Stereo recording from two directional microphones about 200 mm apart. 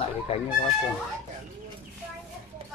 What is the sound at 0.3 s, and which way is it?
Speech, 30° left (ahead or behind).